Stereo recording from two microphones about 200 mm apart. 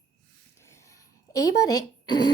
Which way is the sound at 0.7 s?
15° left (ahead or behind).